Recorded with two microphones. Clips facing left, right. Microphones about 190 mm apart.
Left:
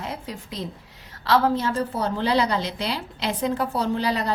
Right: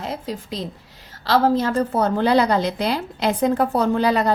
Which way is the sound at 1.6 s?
45° right (ahead or behind).